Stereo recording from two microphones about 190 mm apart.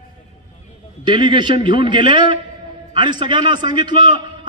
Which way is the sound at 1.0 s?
25° right (ahead or behind).